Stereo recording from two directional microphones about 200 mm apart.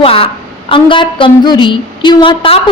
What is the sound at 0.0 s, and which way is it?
A woman's voice, 25° left (ahead or behind).